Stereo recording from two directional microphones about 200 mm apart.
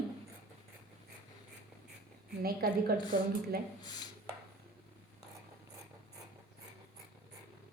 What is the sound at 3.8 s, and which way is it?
Speech, 20° left (ahead or behind).